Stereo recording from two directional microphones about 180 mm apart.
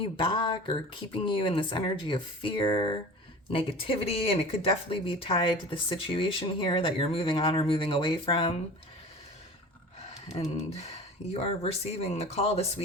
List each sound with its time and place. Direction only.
0.0 s speech: 25° left (ahead or behind)
10.3 s speech: 35° left (ahead or behind)